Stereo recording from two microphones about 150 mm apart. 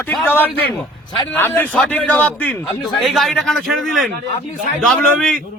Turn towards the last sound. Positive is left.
turn(degrees=5)  # may be behind; listen again after turning